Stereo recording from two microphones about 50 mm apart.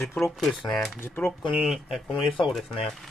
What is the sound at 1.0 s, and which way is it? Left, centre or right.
Speech, left.